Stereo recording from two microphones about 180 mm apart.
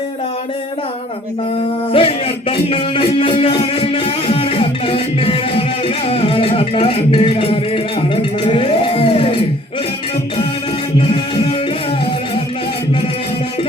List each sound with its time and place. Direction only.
1.9 s music: 30° left (ahead or behind)
11.0 s music: 30° left (ahead or behind)